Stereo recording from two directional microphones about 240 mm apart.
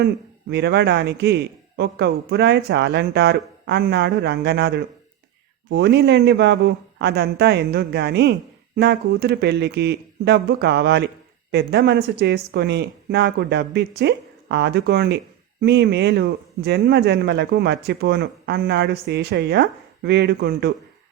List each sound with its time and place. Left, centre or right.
0.5 s a man's voice: right